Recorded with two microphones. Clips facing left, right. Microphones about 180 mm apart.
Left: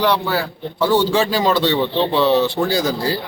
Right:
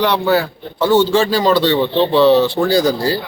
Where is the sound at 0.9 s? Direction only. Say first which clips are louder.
Right 4 dB; 15° left (ahead or behind).